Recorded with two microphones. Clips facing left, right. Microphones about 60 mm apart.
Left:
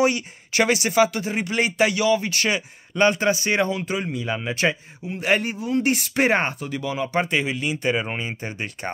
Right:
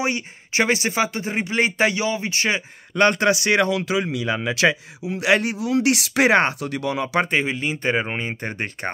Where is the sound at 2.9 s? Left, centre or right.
Right.